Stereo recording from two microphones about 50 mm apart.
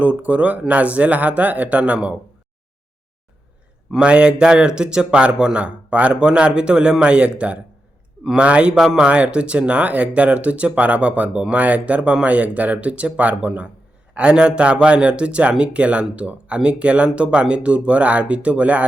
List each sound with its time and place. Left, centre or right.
0.0 s a man's voice: right
4.0 s a man's voice: right
8.7 s speech: centre
9.0 s a man's voice: right